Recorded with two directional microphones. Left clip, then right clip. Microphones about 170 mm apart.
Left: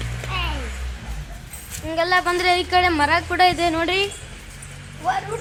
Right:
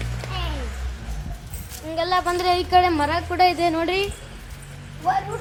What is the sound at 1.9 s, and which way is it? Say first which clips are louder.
Speech: left 2 dB; 15° left (ahead or behind).